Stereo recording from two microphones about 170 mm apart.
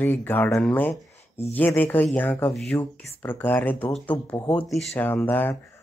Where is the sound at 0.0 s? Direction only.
10° left (ahead or behind).